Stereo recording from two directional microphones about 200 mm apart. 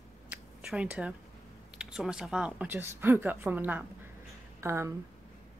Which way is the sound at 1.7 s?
5° right (ahead or behind).